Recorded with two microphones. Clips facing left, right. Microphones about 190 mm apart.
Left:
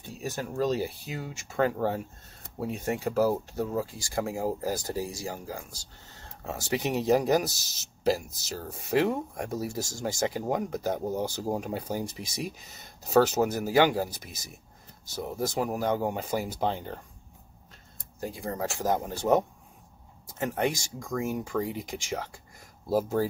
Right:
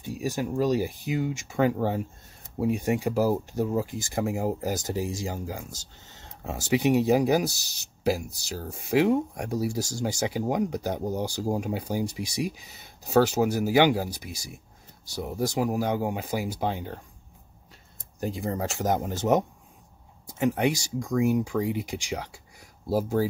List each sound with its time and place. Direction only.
0.0 s speech: 15° right (ahead or behind)
18.2 s speech: 20° right (ahead or behind)